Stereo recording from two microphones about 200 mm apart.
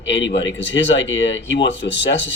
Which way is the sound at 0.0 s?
65° left (ahead or behind).